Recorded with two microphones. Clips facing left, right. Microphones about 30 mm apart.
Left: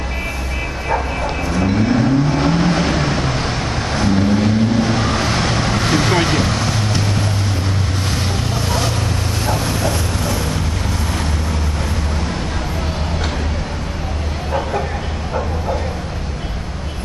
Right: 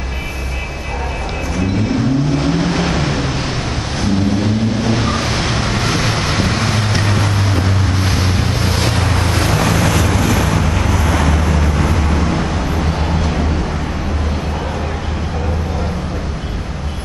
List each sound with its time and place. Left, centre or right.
1.6 s vehicle: centre
2.4 s vehicle: centre
6.5 s boat: centre
8.6 s vehicle: right
9.4 s vehicle: right